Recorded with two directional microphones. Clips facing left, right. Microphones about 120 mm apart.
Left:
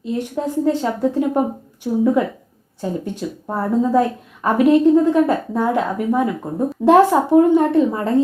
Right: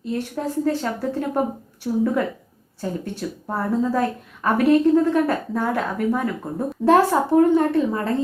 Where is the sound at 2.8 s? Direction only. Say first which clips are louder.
Left 3 dB; 15° left (ahead or behind).